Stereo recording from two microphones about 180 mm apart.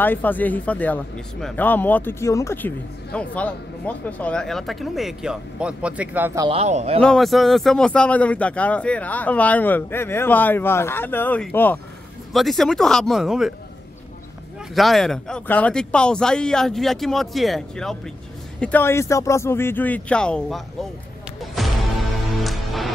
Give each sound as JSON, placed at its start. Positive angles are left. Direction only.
{"t": 0.0, "sound": "a man's voice", "side_deg": 10}
{"t": 6.4, "sound": "a man's voice", "side_deg": -35}
{"t": 7.0, "sound": "a man's voice", "side_deg": 0}
{"t": 14.8, "sound": "a man's voice", "side_deg": 0}
{"t": 21.4, "sound": "music", "side_deg": 0}